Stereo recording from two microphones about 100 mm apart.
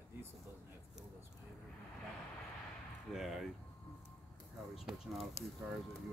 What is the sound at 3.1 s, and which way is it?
Speech, centre (ahead or behind).